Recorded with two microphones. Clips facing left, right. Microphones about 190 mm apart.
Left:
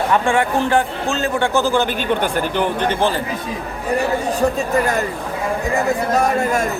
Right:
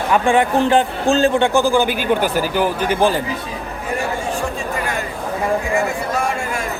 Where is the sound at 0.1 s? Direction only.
15° right (ahead or behind).